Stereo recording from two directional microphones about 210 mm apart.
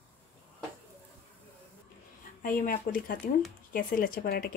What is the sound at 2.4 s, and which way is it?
Speech, 40° left (ahead or behind).